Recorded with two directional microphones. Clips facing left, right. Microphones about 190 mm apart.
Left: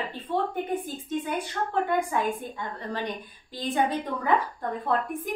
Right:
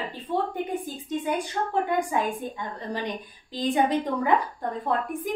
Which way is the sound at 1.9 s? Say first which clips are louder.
Even; 15° right (ahead or behind).